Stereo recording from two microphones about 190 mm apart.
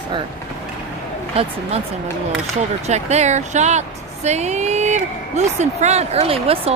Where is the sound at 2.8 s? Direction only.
35° right (ahead or behind).